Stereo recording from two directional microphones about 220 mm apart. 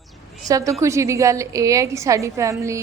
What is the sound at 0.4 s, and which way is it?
A woman's voice, 15° right (ahead or behind).